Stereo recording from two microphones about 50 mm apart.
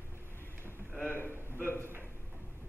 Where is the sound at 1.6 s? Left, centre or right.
Left.